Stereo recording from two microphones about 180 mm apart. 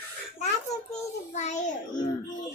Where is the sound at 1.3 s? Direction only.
40° left (ahead or behind).